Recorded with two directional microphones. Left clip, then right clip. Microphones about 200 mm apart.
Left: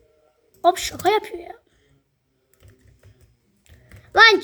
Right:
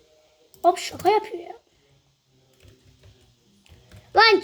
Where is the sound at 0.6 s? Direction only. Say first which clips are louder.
Left 2 dB; 15° left (ahead or behind).